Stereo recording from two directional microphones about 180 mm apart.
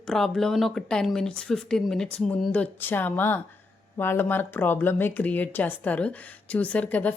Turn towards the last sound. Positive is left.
turn(degrees=10)  # may be behind; listen again after turning